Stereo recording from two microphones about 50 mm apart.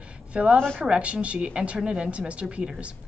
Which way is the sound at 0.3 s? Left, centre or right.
Right.